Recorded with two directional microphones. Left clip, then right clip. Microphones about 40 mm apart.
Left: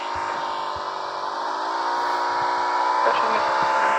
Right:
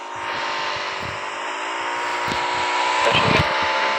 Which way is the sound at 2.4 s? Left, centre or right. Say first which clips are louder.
Right 1 dB; left.